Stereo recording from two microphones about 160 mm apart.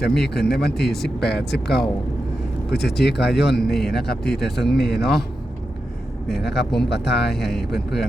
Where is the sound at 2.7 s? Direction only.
90° left.